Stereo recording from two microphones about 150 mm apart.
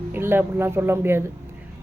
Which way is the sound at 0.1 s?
15° right (ahead or behind).